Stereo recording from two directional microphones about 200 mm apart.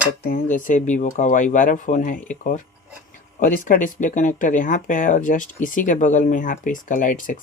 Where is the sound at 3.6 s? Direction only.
40° left (ahead or behind).